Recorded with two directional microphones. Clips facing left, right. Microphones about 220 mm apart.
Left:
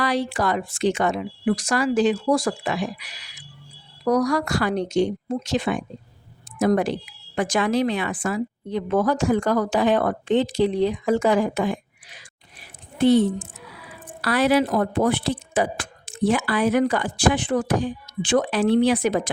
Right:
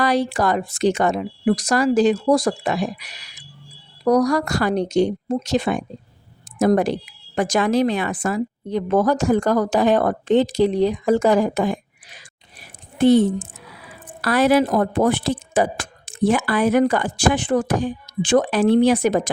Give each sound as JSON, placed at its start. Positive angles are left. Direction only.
{"t": 0.0, "sound": "a woman's voice", "side_deg": -45}